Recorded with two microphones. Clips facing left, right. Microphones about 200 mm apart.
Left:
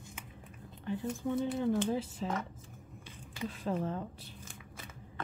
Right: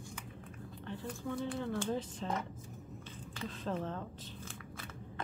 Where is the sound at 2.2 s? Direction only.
5° left (ahead or behind).